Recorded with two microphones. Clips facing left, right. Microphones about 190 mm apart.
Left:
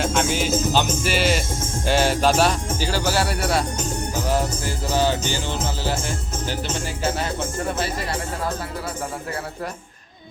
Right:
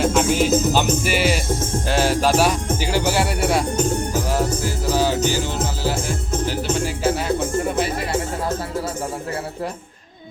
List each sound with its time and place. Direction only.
0.0 s music: centre (ahead or behind); by 3.6 s 20° right (ahead or behind)
4.9 s speech: 5° right (ahead or behind)
6.5 s speech: 5° right (ahead or behind)
7.8 s speech: 25° right (ahead or behind)